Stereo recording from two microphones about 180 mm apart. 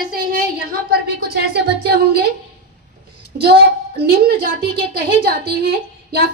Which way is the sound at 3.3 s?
60° right (ahead or behind).